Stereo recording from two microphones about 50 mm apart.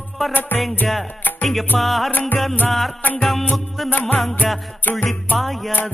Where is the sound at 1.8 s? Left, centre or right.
Centre.